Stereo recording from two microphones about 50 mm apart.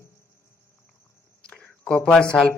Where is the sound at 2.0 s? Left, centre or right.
Centre.